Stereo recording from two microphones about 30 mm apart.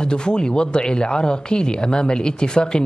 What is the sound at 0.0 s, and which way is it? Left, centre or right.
A man's voice, left.